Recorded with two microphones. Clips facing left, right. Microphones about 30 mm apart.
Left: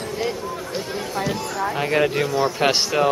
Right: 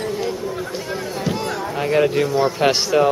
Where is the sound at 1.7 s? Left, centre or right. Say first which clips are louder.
Right 3 dB; centre.